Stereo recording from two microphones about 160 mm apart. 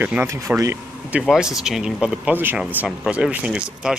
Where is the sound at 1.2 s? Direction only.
5° right (ahead or behind).